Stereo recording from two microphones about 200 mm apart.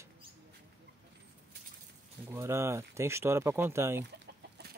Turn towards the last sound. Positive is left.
turn(degrees=-60)  # may be behind; listen again after turning